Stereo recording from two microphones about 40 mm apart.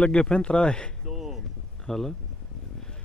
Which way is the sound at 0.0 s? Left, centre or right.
Left.